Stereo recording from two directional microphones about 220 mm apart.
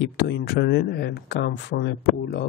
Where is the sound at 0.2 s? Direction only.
50° left (ahead or behind).